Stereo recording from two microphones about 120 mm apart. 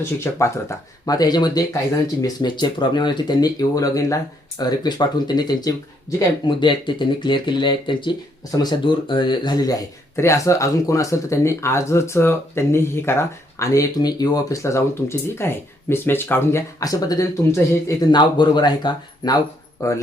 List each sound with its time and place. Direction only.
0.0 s speech: 25° left (ahead or behind)
6.4 s speech: 40° left (ahead or behind)
18.2 s speech: 40° left (ahead or behind)
19.8 s speech: 25° left (ahead or behind)